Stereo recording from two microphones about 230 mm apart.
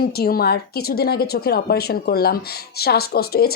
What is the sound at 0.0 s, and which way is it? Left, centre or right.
A woman's voice, left.